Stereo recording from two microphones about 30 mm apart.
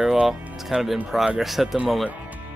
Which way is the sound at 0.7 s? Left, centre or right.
Right.